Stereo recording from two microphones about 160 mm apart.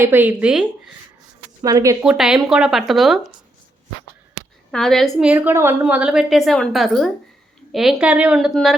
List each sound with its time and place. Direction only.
0.0 s speech: 10° right (ahead or behind)
1.6 s speech: 20° right (ahead or behind)
2.0 s a woman's voice: 5° right (ahead or behind)
4.7 s a woman's voice: 5° left (ahead or behind)